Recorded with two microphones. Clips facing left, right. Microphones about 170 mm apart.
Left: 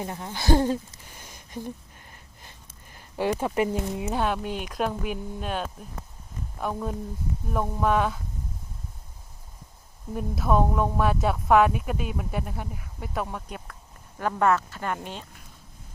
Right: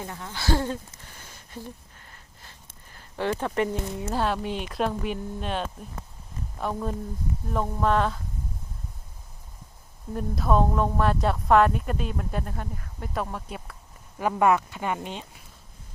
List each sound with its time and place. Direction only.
0.0 s speech: 20° left (ahead or behind)
1.1 s a sound: 15° left (ahead or behind)
4.1 s speech: 5° left (ahead or behind)
10.1 s speech: 5° left (ahead or behind)